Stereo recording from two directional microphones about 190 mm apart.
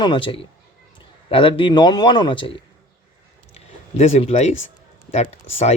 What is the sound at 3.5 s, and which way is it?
Speech, 35° left (ahead or behind).